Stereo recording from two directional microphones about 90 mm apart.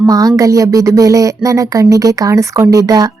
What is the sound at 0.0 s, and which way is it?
Speech, 40° right (ahead or behind).